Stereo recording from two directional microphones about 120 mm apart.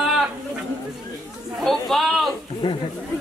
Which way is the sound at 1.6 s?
Centre (ahead or behind).